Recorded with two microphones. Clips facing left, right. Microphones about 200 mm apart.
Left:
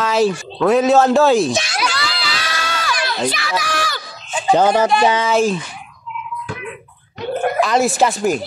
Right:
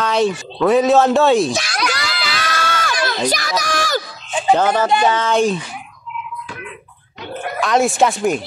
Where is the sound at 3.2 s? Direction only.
40° right (ahead or behind).